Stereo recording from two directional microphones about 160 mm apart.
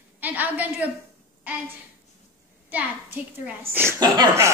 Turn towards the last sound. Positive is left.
turn(degrees=-20)  # may be behind; listen again after turning